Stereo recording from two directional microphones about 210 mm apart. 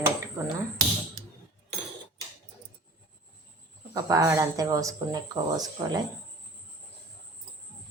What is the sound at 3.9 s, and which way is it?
Speech, 15° right (ahead or behind).